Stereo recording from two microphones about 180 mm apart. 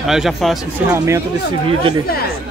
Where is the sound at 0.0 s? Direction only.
Centre (ahead or behind).